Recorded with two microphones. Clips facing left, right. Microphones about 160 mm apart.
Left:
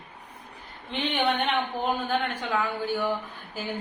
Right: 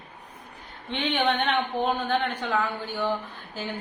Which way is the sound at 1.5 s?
10° left (ahead or behind).